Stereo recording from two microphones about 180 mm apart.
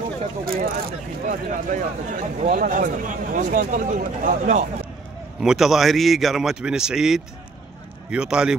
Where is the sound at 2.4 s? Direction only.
50° right (ahead or behind).